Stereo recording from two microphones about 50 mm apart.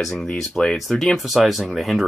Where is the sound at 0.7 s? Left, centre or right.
Centre.